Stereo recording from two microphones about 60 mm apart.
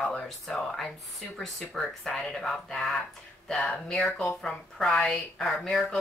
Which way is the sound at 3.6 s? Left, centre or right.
Centre.